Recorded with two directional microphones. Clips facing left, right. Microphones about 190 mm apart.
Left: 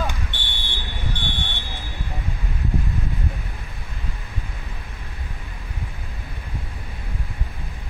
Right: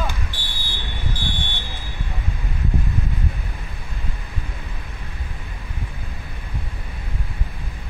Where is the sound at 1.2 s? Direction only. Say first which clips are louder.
Right 1 dB; centre (ahead or behind).